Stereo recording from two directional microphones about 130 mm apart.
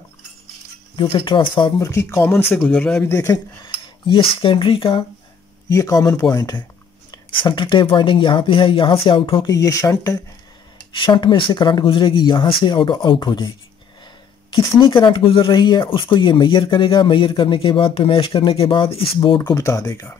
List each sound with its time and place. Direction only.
0.9 s speech: 40° left (ahead or behind)
1.8 s speech: 20° left (ahead or behind)
3.1 s speech: 20° left (ahead or behind)
3.6 s speech: 40° left (ahead or behind)
5.7 s speech: 25° left (ahead or behind)
10.9 s speech: 40° left (ahead or behind)
14.5 s speech: 40° left (ahead or behind)
19.5 s speech: 25° left (ahead or behind)